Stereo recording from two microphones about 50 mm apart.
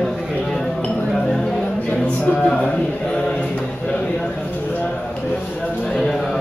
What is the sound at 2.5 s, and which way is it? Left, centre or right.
Speech, centre.